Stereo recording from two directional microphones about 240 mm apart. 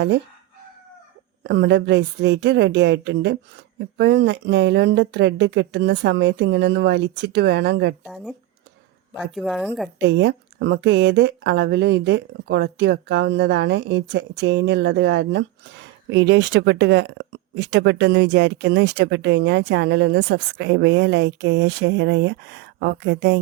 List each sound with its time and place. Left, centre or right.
1.5 s speech: right
8.0 s speech: centre
10.0 s speech: right